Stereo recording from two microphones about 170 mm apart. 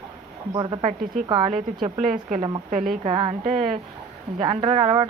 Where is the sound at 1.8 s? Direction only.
50° right (ahead or behind).